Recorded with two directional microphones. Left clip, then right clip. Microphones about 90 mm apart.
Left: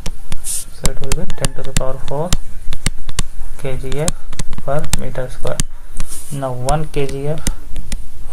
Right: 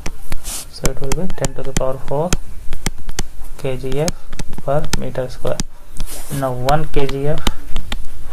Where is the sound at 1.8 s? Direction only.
20° right (ahead or behind).